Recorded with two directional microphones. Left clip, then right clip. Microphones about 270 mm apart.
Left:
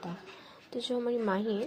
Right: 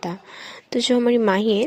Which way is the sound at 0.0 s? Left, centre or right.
Right.